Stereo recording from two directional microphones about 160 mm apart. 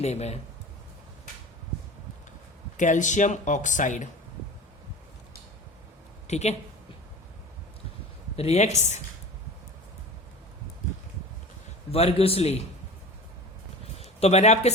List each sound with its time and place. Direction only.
0.0 s speech: 45° left (ahead or behind)
2.7 s speech: 50° left (ahead or behind)
6.2 s speech: 45° left (ahead or behind)
8.4 s speech: 40° left (ahead or behind)
11.9 s a man's voice: 40° left (ahead or behind)
14.0 s speech: 45° left (ahead or behind)